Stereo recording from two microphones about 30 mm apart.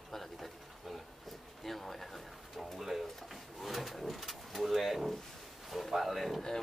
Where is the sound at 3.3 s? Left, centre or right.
Centre.